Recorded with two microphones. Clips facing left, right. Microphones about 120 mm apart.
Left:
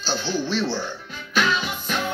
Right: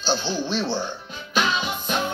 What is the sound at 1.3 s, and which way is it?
Music, 20° right (ahead or behind).